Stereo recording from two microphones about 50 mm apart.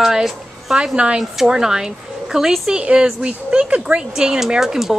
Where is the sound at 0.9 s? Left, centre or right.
Centre.